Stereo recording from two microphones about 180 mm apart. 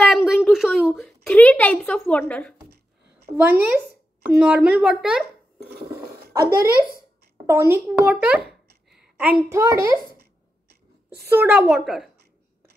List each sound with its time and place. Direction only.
0.0 s speech: centre (ahead or behind)
3.3 s a child's voice: 10° right (ahead or behind)
6.3 s a child's voice: 15° right (ahead or behind)
11.2 s a child's voice: 10° right (ahead or behind)